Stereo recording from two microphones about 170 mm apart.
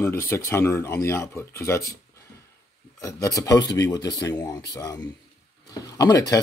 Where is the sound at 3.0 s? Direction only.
20° left (ahead or behind).